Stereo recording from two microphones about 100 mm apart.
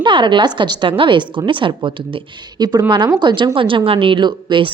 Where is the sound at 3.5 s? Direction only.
60° right (ahead or behind).